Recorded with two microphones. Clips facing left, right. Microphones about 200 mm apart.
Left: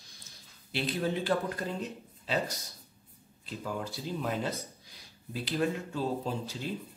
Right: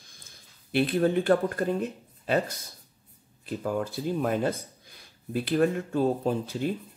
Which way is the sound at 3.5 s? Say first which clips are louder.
Right 7 dB; 50° right (ahead or behind).